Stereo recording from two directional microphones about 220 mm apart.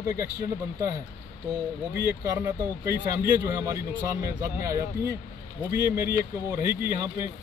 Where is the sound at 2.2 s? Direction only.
10° right (ahead or behind).